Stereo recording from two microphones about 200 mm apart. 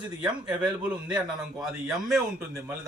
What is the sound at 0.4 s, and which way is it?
A man's voice, 5° right (ahead or behind).